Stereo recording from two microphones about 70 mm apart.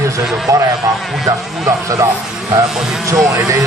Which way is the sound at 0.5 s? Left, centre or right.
Right.